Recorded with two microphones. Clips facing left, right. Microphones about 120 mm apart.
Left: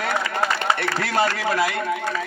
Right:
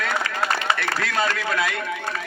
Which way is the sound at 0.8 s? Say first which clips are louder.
Left 3 dB; 30° left (ahead or behind).